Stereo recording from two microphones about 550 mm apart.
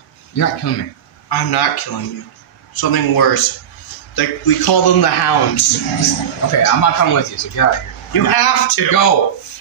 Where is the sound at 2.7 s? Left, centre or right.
Left.